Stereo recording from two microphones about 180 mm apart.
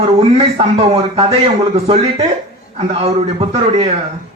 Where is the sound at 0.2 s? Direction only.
35° right (ahead or behind).